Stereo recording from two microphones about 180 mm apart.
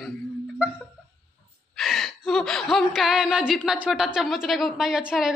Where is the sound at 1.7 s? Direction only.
Centre (ahead or behind).